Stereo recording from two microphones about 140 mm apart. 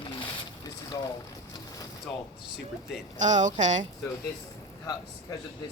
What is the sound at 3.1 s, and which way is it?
Speech, 60° right (ahead or behind).